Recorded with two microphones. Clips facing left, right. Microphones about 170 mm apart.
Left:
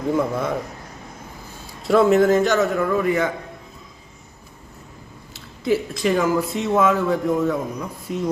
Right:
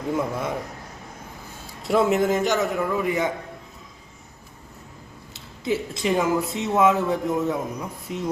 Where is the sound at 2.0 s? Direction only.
15° right (ahead or behind).